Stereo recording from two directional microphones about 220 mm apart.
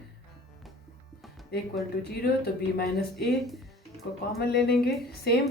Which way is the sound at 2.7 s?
45° left (ahead or behind).